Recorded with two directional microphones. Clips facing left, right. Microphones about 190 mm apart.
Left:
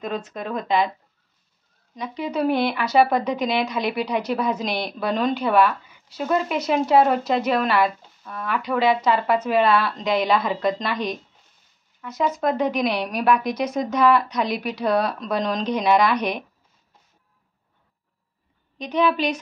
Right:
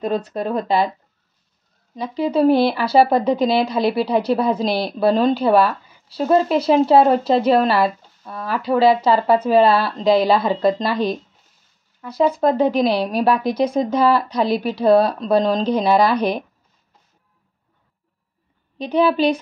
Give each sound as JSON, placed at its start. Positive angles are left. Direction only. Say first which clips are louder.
{"t": 0.0, "sound": "speech", "louder": "right 7 dB", "side_deg": -35}
{"t": 2.0, "sound": "speech", "louder": "right 7 dB", "side_deg": -30}
{"t": 18.8, "sound": "speech", "louder": "right 4 dB", "side_deg": -30}